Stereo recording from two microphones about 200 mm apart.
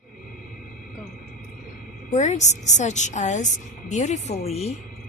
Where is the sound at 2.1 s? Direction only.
35° left (ahead or behind).